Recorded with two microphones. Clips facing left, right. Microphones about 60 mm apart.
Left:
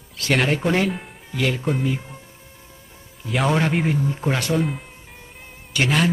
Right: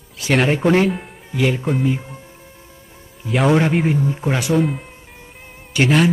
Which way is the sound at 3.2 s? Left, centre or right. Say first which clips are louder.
Right 5 dB; centre.